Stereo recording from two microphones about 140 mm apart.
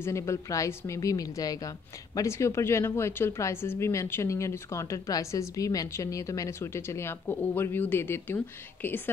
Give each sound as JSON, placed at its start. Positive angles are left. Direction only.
{"t": 0.0, "sound": "a woman's voice", "side_deg": 20}